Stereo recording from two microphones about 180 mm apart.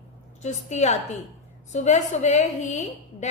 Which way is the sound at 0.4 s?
40° left (ahead or behind).